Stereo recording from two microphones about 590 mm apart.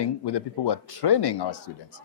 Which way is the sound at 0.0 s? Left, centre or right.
Left.